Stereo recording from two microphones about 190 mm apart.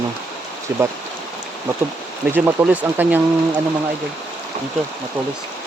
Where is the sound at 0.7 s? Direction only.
15° right (ahead or behind).